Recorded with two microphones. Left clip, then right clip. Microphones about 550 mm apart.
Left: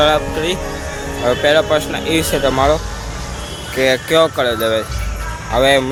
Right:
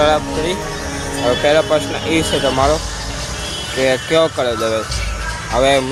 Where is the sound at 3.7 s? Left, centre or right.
Left.